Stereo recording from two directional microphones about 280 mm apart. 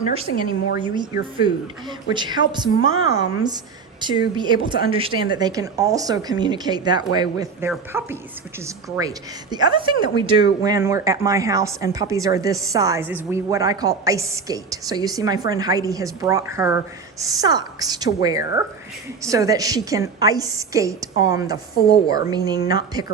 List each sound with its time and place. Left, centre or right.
0.1 s a woman's voice: right
4.0 s speech: centre
21.8 s speech: left
22.0 s speech: centre